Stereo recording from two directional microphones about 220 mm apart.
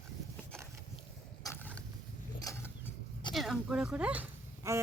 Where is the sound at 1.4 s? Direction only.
10° left (ahead or behind).